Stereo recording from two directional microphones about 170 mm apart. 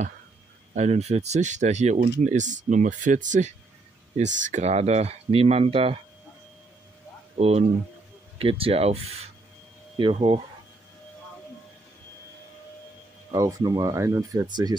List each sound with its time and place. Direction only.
0.7 s speech: 40° right (ahead or behind)
7.3 s speech: 40° right (ahead or behind)
13.3 s speech: 20° right (ahead or behind)